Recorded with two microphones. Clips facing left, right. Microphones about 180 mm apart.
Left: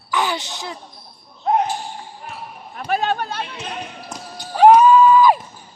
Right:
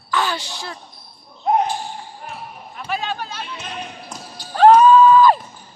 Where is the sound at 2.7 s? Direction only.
50° left (ahead or behind).